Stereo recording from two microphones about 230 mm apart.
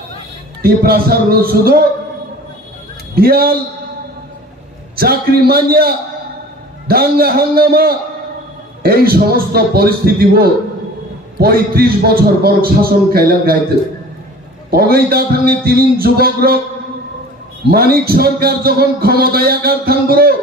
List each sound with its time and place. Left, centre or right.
0.6 s a man's voice: right
3.2 s a man's voice: right
4.9 s a man's voice: right
14.7 s a man's voice: right
17.6 s a man's voice: right